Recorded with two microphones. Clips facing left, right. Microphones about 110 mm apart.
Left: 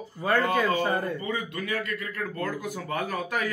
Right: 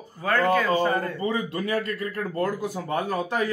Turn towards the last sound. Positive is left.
turn(degrees=-30)  # may be behind; listen again after turning